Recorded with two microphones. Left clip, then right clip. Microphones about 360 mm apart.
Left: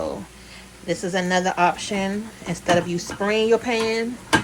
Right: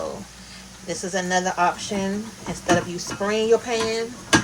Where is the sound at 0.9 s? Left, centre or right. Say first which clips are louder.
Left 2 dB; left.